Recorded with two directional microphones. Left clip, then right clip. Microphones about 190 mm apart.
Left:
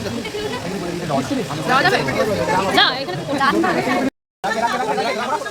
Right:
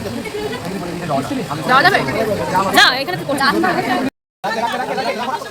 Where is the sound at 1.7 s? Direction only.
40° right (ahead or behind).